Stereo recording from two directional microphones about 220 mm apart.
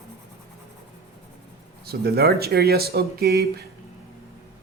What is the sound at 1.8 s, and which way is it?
Speech, 45° right (ahead or behind).